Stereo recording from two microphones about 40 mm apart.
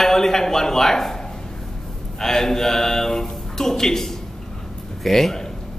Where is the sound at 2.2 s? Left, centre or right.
Centre.